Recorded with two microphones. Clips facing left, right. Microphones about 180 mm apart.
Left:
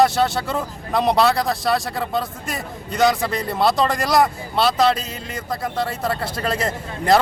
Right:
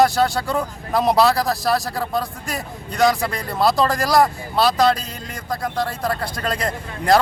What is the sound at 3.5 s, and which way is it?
Speech, centre (ahead or behind).